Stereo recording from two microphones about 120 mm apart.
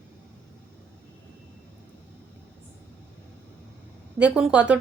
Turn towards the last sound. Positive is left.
turn(degrees=-10)  # may be behind; listen again after turning